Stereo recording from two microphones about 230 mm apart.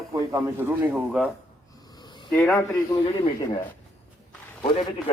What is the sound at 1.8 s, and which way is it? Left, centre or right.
Wheeze, centre.